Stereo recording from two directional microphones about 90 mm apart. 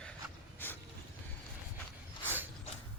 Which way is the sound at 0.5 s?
20° left (ahead or behind).